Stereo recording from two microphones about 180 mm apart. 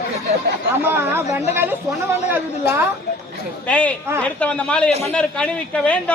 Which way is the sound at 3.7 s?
5° left (ahead or behind).